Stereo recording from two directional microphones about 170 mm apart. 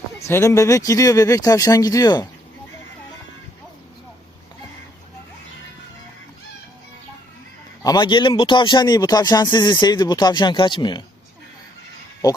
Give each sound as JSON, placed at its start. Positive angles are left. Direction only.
{"t": 0.2, "sound": "speech", "side_deg": 15}
{"t": 7.9, "sound": "speech", "side_deg": 25}